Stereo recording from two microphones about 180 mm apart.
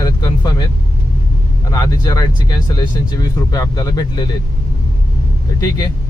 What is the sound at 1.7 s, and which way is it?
Speech, 20° left (ahead or behind).